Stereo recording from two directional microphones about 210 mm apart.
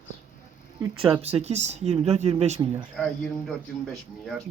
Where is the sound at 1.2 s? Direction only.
30° right (ahead or behind).